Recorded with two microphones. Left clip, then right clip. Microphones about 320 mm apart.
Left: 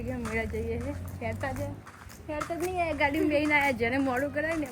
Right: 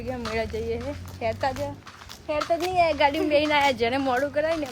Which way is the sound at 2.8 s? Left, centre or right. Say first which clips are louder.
Right 6 dB; centre.